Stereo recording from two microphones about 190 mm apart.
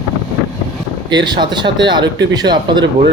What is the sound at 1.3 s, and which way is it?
Speech, 25° right (ahead or behind).